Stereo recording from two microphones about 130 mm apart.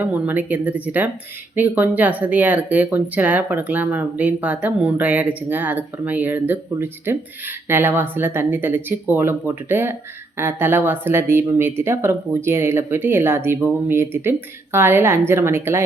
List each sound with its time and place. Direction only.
0.0 s a woman's voice: 15° right (ahead or behind)